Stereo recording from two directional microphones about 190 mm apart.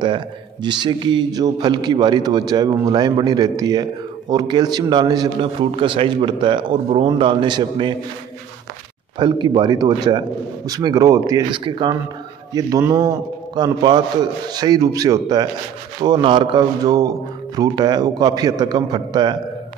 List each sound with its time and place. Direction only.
0.0 s a man's voice: 25° right (ahead or behind)
9.2 s a man's voice: 25° right (ahead or behind)